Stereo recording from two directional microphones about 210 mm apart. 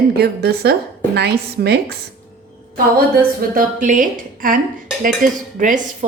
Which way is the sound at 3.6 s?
40° right (ahead or behind).